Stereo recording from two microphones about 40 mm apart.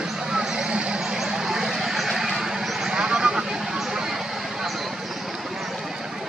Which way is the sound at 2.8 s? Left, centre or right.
Centre.